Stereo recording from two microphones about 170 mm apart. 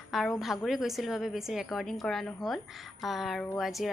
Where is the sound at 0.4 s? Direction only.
Centre (ahead or behind).